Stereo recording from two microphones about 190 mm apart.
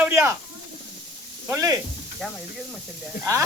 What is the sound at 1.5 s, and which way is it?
Speech, 15° right (ahead or behind).